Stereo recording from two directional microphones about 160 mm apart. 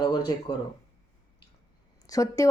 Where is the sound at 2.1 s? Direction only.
20° left (ahead or behind).